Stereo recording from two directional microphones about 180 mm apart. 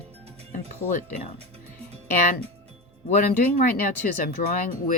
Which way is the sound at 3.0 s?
45° left (ahead or behind).